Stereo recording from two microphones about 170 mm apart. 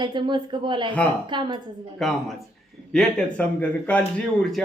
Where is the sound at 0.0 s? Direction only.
25° right (ahead or behind).